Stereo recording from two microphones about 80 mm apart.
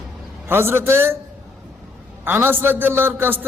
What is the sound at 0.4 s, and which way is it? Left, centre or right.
Speech, right.